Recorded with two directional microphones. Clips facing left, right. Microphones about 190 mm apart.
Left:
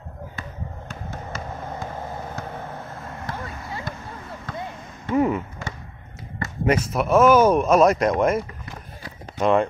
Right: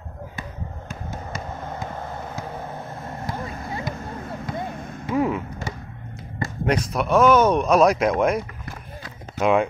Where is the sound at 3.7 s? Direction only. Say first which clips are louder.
Right 3 dB; 20° right (ahead or behind).